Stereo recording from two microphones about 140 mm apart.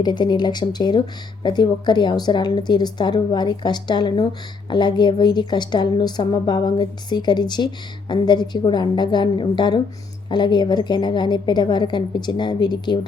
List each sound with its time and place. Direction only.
0.0 s a woman's voice: 30° left (ahead or behind)